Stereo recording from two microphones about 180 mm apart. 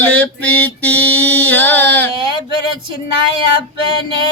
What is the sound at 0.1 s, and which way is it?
Mantra, 10° left (ahead or behind).